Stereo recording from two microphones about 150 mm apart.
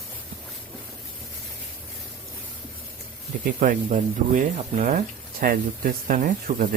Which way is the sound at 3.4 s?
60° right (ahead or behind).